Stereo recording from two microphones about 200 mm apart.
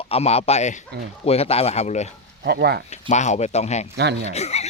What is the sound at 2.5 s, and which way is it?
Speech, 55° right (ahead or behind).